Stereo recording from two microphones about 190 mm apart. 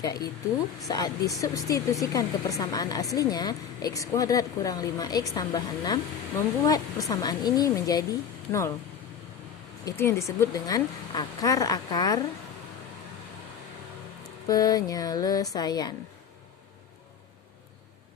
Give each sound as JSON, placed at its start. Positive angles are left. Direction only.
{"t": 0.0, "sound": "a woman's voice", "side_deg": 20}
{"t": 9.8, "sound": "a woman's voice", "side_deg": 15}
{"t": 14.3, "sound": "a woman's voice", "side_deg": 20}